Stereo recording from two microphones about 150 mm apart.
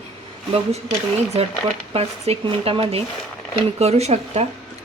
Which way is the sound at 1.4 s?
40° right (ahead or behind).